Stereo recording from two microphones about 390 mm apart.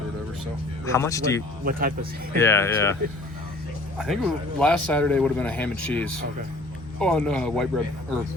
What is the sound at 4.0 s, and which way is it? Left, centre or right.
Speech, centre.